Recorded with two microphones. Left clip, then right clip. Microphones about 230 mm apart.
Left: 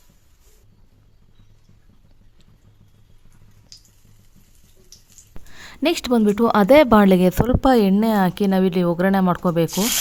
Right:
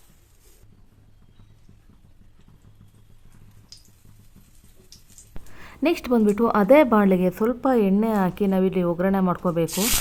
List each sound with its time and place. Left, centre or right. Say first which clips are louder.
5.5 s speech: left 2 dB; left